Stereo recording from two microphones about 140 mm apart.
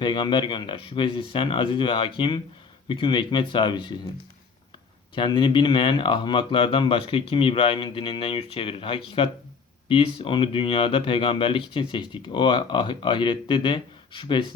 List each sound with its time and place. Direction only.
0.0 s speech: 35° left (ahead or behind)
5.1 s speech: 35° left (ahead or behind)